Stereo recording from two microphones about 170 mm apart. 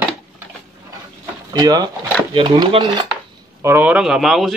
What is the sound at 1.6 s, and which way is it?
Speech, 25° right (ahead or behind).